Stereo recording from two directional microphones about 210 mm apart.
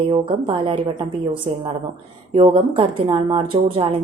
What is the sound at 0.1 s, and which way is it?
A woman's voice, 25° right (ahead or behind).